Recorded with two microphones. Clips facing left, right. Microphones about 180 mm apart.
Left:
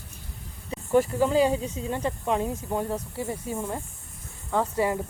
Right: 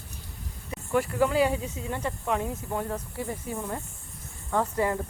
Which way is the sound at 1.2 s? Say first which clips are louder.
Left 2 dB; 25° left (ahead or behind).